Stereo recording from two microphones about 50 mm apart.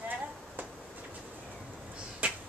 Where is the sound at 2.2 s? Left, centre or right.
Right.